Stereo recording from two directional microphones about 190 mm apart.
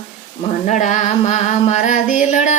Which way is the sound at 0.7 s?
40° left (ahead or behind).